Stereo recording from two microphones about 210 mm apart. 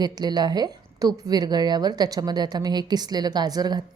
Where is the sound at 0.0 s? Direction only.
20° right (ahead or behind).